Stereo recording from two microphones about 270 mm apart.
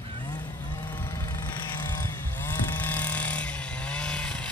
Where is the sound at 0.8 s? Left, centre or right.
Centre.